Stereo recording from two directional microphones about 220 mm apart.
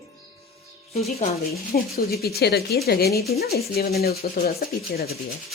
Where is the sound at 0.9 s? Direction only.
30° left (ahead or behind).